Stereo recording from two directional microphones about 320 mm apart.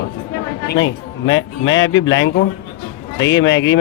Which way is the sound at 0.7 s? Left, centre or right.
Left.